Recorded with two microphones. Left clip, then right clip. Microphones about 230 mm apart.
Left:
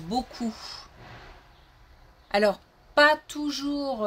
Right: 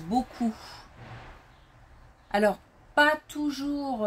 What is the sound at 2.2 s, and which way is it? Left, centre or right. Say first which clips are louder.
A woman's voice: left 2 dB; left.